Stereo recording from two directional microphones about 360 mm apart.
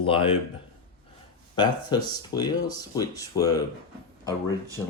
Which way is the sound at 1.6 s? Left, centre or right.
Centre.